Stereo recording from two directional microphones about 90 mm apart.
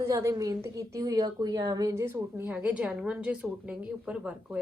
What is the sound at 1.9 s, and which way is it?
Speech, 30° right (ahead or behind).